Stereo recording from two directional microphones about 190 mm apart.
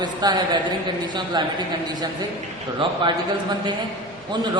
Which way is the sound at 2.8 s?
25° right (ahead or behind).